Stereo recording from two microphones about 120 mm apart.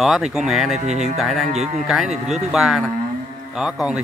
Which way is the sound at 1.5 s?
65° right (ahead or behind).